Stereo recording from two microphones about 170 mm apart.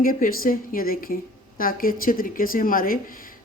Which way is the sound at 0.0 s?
55° left (ahead or behind).